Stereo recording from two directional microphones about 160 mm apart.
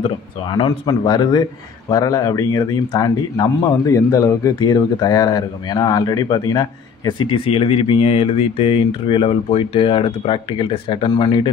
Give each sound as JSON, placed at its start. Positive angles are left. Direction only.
{"t": 0.5, "sound": "speech", "side_deg": 25}